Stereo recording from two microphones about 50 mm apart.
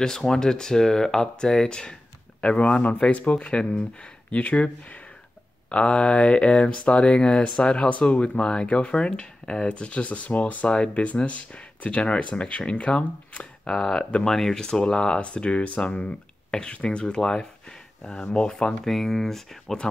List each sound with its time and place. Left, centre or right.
0.3 s speech: centre
13.7 s speech: centre
18.9 s speech: centre